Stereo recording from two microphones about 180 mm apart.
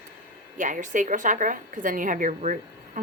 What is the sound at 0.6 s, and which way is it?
Speech, 45° right (ahead or behind).